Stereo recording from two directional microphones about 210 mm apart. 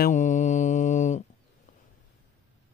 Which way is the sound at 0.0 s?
35° left (ahead or behind).